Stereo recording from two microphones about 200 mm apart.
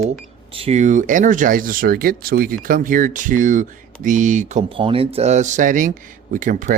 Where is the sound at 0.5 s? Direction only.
30° right (ahead or behind).